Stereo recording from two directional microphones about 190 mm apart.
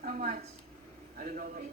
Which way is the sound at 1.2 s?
45° right (ahead or behind).